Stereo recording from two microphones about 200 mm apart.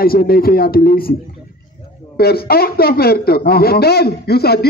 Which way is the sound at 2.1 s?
50° left (ahead or behind).